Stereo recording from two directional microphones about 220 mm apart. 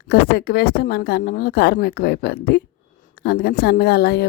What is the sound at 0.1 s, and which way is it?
Speech, 45° left (ahead or behind).